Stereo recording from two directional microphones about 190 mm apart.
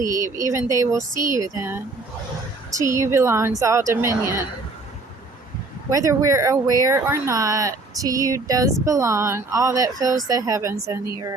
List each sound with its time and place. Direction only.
0.4 s speech: 15° right (ahead or behind)
5.9 s speech: 15° right (ahead or behind)